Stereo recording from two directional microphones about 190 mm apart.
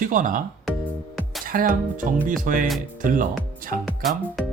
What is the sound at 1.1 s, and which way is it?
Music, centre (ahead or behind).